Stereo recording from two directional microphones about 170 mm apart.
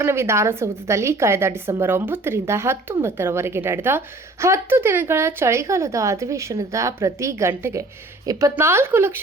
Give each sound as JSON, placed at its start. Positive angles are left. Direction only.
{"t": 0.0, "sound": "a woman's voice", "side_deg": -15}